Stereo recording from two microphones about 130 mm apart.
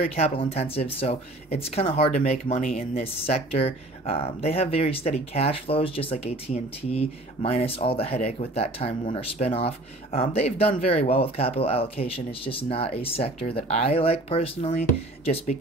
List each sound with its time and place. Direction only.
0.1 s speech: 50° left (ahead or behind)